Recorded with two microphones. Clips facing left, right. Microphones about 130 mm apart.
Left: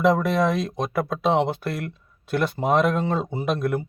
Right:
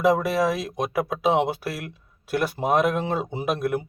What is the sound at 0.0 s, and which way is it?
Speech, 5° right (ahead or behind).